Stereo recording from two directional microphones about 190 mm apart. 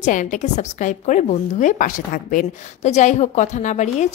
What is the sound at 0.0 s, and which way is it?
A woman's voice, 40° left (ahead or behind).